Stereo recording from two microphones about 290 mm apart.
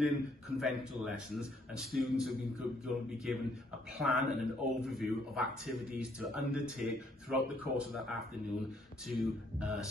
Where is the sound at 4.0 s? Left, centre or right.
Centre.